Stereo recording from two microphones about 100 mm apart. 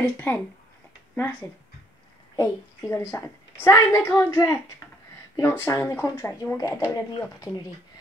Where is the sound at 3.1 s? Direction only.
30° left (ahead or behind).